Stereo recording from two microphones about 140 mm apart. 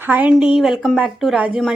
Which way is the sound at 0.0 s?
10° right (ahead or behind).